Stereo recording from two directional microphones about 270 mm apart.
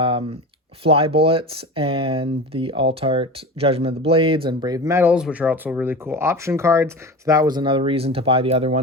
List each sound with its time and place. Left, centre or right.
0.0 s speech: centre